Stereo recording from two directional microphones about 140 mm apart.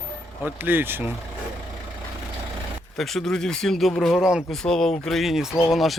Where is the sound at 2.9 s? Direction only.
Centre (ahead or behind).